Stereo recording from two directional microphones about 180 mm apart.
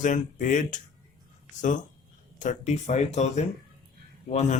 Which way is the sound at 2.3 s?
40° left (ahead or behind).